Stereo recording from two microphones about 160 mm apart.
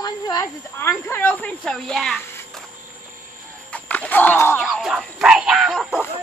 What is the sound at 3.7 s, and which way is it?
Chicken, 10° left (ahead or behind).